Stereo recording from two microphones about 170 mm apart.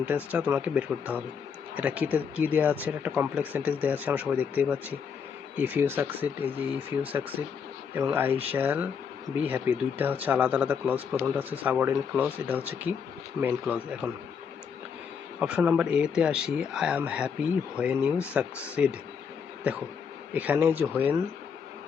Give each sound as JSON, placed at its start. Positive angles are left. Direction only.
{"t": 0.0, "sound": "speech", "side_deg": -10}
{"t": 15.4, "sound": "speech", "side_deg": -5}